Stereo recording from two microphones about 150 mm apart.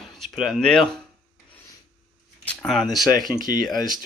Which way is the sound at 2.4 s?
5° left (ahead or behind).